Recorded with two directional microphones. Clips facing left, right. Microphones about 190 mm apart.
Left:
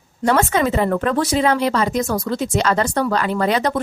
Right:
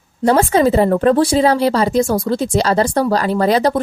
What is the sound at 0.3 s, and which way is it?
Speech, 35° right (ahead or behind).